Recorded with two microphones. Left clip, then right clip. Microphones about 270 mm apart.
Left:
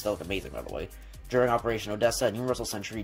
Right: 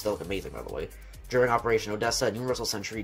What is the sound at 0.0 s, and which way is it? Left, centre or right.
Speech, left.